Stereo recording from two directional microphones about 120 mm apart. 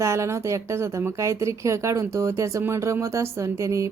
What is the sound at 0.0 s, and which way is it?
Speech, 25° right (ahead or behind).